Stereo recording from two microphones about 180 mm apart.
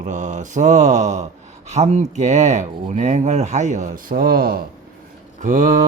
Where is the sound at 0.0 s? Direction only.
45° right (ahead or behind).